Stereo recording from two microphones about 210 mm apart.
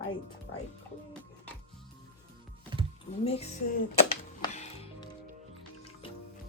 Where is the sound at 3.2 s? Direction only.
30° left (ahead or behind).